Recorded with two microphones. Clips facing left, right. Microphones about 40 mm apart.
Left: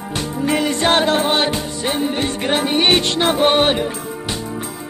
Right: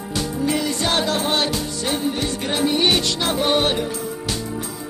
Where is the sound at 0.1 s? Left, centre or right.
Left.